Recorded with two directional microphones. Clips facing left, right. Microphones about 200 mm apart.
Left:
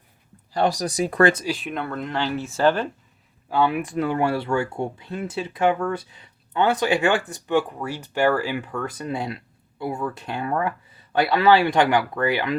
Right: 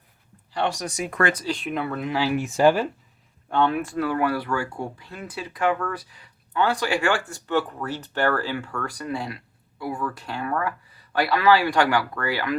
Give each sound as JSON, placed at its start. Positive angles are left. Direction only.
{"t": 0.5, "sound": "speech", "side_deg": 40}
{"t": 1.5, "sound": "speech", "side_deg": 0}
{"t": 3.5, "sound": "speech", "side_deg": 10}